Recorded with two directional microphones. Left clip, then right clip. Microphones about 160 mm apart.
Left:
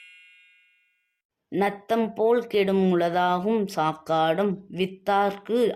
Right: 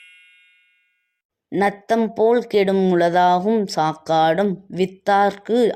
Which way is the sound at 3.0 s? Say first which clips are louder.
Right 11 dB; 25° right (ahead or behind).